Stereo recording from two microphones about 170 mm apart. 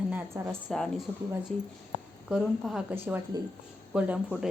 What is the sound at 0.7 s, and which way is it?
Speech, 5° left (ahead or behind).